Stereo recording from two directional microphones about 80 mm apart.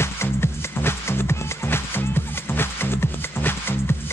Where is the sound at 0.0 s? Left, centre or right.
Left.